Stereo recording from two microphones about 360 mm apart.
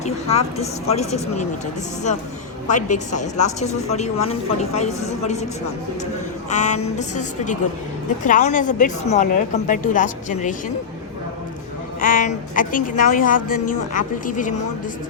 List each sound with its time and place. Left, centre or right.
0.0 s speech: centre
2.6 s a woman's voice: centre
6.5 s a woman's voice: centre
11.9 s a woman's voice: left